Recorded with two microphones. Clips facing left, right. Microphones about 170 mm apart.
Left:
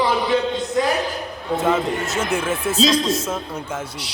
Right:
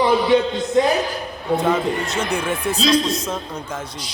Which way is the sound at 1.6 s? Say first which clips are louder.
Left 2 dB; 5° left (ahead or behind).